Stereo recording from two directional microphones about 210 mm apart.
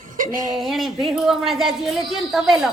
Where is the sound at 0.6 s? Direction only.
Centre (ahead or behind).